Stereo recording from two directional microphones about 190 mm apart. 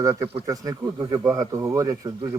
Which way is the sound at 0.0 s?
15° right (ahead or behind).